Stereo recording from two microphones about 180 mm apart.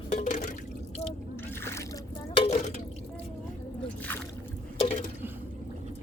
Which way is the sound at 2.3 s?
40° left (ahead or behind).